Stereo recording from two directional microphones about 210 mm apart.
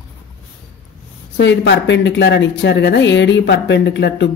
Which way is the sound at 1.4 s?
60° left (ahead or behind).